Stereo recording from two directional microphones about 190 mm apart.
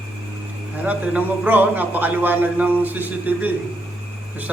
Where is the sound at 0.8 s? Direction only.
10° right (ahead or behind).